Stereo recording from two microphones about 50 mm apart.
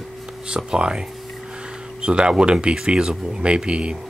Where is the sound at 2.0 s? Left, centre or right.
Centre.